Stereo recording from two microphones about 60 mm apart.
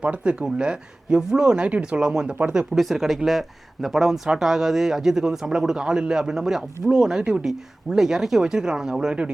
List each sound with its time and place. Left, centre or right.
0.0 s speech: centre
2.7 s speech: centre